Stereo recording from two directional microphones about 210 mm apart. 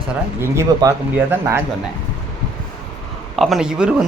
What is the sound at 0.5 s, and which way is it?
Speech, 15° right (ahead or behind).